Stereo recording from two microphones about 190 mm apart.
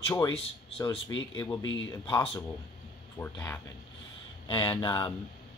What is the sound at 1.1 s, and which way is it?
Speech, 80° left.